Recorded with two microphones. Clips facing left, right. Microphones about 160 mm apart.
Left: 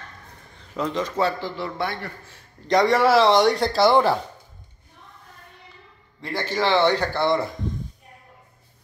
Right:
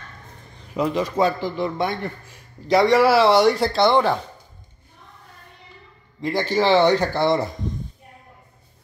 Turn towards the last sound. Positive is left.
turn(degrees=-20)  # may be behind; listen again after turning